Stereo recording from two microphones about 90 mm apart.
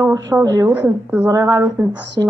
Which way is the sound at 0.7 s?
20° right (ahead or behind).